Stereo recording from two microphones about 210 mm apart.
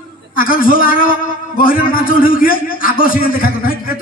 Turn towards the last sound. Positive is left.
turn(degrees=45)  # may be behind; listen again after turning